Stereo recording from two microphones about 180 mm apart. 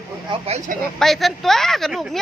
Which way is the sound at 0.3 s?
35° right (ahead or behind).